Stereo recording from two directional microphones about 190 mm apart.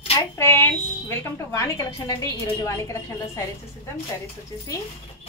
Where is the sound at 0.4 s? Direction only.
15° left (ahead or behind).